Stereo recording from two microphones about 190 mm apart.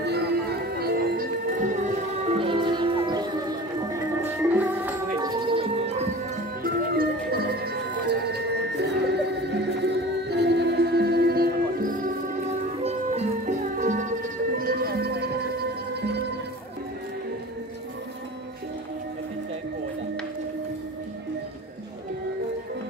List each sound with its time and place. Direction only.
0.0 s music: 60° right (ahead or behind); by 5.2 s 10° right (ahead or behind)
5.2 s music: 25° right (ahead or behind)
6.6 s music: 55° right (ahead or behind)